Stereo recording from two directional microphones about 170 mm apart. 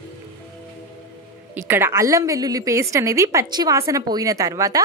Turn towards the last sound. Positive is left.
turn(degrees=-20)  # may be behind; listen again after turning